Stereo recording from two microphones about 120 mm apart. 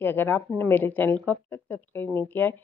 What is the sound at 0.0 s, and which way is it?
Speech, 15° left (ahead or behind).